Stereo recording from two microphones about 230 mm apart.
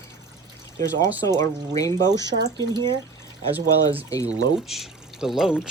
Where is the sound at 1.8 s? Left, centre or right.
Centre.